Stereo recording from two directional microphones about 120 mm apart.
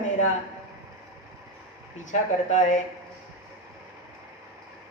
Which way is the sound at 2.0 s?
90° left.